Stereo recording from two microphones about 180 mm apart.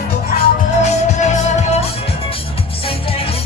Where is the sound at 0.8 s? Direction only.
40° left (ahead or behind).